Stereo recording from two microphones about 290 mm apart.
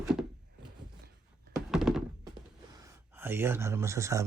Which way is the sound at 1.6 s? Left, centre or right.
Centre.